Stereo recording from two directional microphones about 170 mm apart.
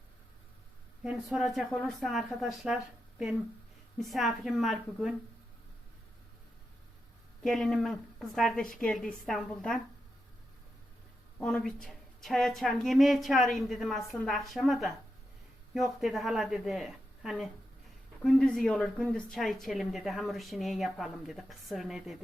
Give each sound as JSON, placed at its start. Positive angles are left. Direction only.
{"t": 1.0, "sound": "speech", "side_deg": -5}
{"t": 7.4, "sound": "speech", "side_deg": 0}
{"t": 11.3, "sound": "speech", "side_deg": 5}